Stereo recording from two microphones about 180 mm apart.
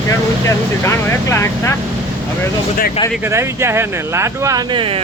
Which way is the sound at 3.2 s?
15° right (ahead or behind).